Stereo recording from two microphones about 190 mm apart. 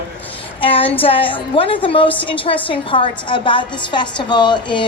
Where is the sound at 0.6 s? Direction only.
30° left (ahead or behind).